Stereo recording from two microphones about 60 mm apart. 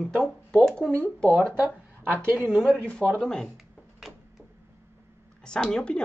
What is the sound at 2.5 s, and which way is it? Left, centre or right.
Speech, centre.